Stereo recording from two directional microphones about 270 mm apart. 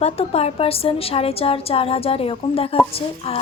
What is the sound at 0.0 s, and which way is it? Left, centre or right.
A woman's voice, left.